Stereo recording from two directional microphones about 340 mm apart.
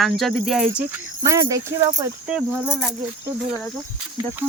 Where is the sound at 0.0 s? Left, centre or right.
Centre.